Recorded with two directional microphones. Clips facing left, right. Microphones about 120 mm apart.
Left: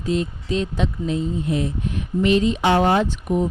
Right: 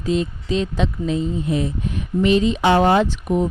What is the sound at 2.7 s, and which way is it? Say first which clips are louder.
Speech: right 2 dB; 90° right.